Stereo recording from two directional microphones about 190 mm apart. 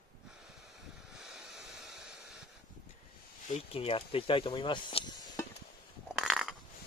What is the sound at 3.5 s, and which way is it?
Speech, 30° left (ahead or behind).